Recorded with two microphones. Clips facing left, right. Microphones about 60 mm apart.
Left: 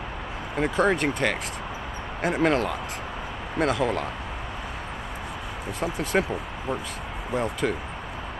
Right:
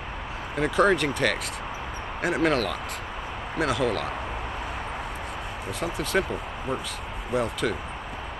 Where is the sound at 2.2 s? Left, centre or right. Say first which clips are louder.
Left 1 dB; centre.